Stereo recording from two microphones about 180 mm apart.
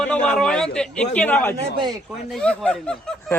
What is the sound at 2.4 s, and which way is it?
A man's voice, 5° left (ahead or behind).